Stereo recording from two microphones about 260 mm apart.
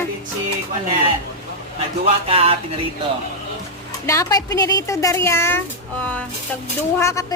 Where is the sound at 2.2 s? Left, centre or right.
Right.